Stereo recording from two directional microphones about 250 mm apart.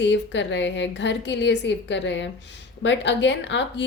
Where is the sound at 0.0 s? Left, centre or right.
Left.